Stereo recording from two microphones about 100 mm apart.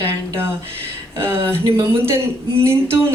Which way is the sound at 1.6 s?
30° right (ahead or behind).